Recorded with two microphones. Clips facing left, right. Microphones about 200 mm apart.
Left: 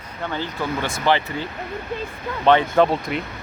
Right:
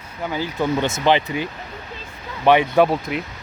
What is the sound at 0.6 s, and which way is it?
A man's voice, 20° right (ahead or behind).